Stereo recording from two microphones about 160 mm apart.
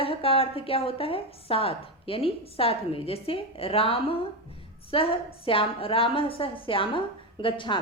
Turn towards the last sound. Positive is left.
turn(degrees=30)  # may be behind; listen again after turning